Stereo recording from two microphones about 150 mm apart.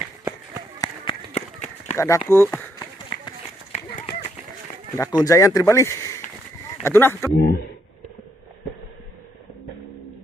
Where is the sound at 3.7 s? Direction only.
45° left (ahead or behind).